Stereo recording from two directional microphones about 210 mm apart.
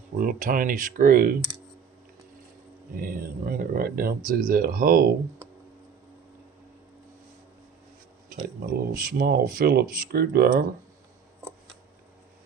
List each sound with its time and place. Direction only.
0.2 s speech: 40° right (ahead or behind)
2.9 s speech: 45° right (ahead or behind)
8.6 s speech: 45° right (ahead or behind)